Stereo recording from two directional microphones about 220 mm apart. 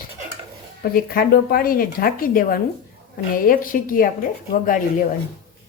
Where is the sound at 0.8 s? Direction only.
40° left (ahead or behind).